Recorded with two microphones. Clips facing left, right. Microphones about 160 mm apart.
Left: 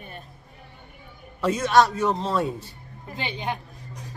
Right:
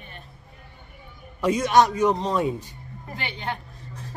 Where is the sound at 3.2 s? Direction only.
15° left (ahead or behind).